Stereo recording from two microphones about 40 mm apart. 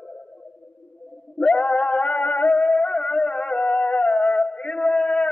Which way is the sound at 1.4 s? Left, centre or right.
Left.